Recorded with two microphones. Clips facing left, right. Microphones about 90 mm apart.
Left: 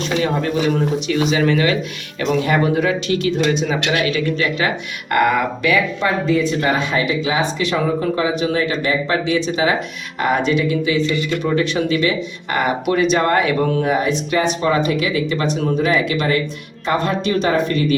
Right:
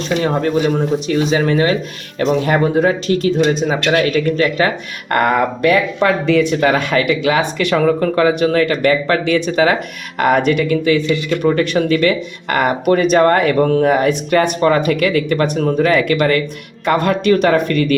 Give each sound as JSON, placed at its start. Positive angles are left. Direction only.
{"t": 0.2, "sound": "speech", "side_deg": -40}
{"t": 6.2, "sound": "speech", "side_deg": -70}